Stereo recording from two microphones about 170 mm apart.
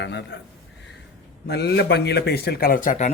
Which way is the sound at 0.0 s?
90° left.